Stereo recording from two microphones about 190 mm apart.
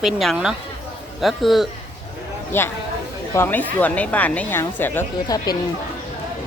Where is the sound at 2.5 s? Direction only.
10° left (ahead or behind).